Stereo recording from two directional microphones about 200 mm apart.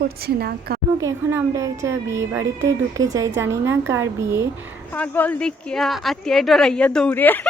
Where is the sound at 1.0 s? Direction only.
15° right (ahead or behind).